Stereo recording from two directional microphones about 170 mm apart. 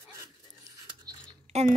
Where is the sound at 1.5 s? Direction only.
40° right (ahead or behind).